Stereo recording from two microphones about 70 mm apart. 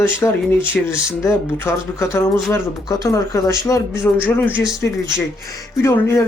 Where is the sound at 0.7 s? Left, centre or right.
Centre.